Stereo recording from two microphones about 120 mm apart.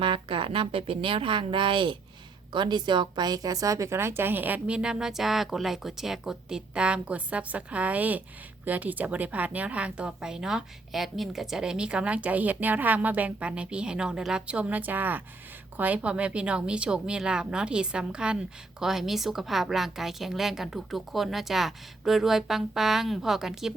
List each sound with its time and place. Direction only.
0.0 s a woman's voice: 45° right (ahead or behind); by 23.7 s 5° right (ahead or behind)